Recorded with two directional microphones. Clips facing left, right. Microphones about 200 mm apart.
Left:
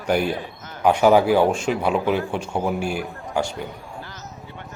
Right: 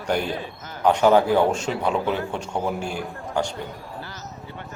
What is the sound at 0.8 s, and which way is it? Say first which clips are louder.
Speech: left 1 dB; 10° left (ahead or behind).